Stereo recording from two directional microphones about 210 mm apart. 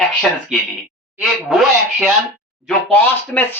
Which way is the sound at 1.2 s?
Centre (ahead or behind).